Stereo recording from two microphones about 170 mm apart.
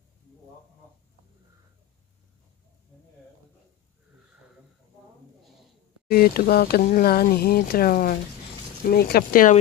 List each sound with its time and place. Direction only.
6.0 s speech: 60° left (ahead or behind)